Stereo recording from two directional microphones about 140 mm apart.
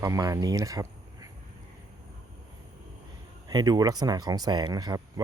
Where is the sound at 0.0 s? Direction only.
25° right (ahead or behind).